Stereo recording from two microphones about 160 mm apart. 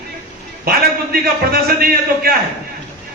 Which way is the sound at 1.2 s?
70° right (ahead or behind).